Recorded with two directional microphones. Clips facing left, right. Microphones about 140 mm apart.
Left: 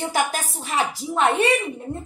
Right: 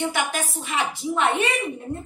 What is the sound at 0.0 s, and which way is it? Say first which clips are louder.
A woman's voice: left 1 dB; 40° left (ahead or behind).